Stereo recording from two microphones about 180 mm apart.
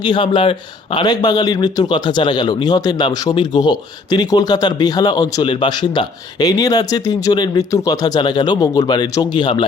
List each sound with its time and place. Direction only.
0.0 s a man's voice: 25° left (ahead or behind)